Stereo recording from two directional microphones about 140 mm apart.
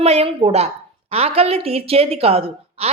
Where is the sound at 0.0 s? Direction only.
50° right (ahead or behind).